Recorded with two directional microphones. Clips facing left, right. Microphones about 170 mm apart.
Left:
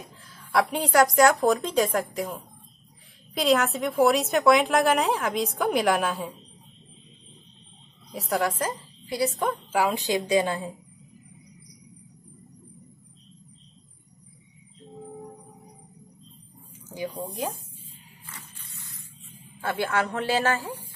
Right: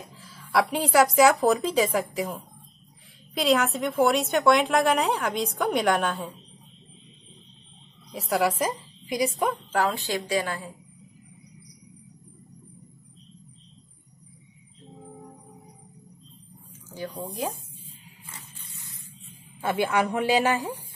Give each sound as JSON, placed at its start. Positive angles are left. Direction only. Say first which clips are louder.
{"t": 0.2, "sound": "a woman's voice", "louder": "even", "side_deg": 0}
{"t": 3.3, "sound": "a woman's voice", "louder": "even", "side_deg": 0}
{"t": 8.1, "sound": "a woman's voice", "louder": "right 2 dB", "side_deg": 0}
{"t": 9.7, "sound": "a woman's voice", "louder": "left 1 dB", "side_deg": 10}
{"t": 16.9, "sound": "speech", "louder": "left 2 dB", "side_deg": 15}
{"t": 19.6, "sound": "speech", "louder": "right 2 dB", "side_deg": -15}